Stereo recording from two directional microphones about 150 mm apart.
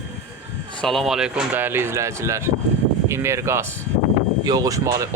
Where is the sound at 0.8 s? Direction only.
Centre (ahead or behind).